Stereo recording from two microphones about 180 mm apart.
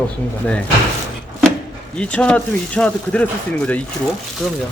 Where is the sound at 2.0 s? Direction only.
5° left (ahead or behind).